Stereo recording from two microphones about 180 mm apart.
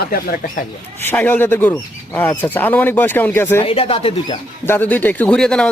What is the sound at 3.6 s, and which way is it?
Speech, 30° left (ahead or behind).